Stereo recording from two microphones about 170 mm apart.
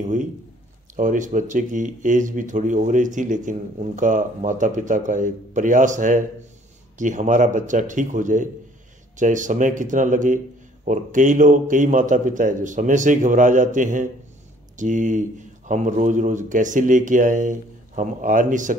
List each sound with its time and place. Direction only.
0.0 s speech: 45° right (ahead or behind)